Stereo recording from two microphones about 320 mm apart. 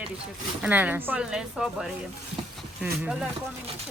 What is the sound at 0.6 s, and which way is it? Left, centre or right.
Speech, centre.